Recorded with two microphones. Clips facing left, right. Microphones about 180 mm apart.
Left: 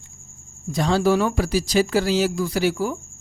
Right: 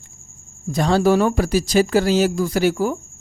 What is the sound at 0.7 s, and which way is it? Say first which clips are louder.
Speech: right 3 dB; 50° right (ahead or behind).